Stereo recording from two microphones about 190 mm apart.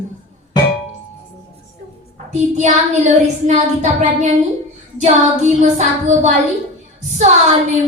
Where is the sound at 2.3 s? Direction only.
35° right (ahead or behind).